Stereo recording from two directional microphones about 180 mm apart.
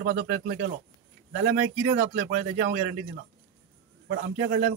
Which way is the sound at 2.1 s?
60° right (ahead or behind).